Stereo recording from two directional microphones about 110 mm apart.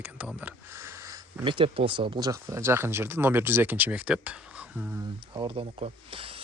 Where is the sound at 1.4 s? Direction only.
50° right (ahead or behind).